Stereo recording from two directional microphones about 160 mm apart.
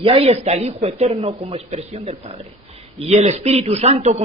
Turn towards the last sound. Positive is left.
turn(degrees=-45)  # may be behind; listen again after turning